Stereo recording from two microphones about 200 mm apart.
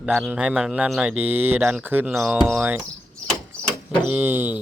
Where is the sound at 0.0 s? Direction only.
Centre (ahead or behind).